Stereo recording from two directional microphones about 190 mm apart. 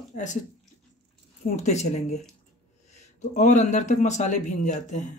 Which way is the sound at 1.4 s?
45° left (ahead or behind).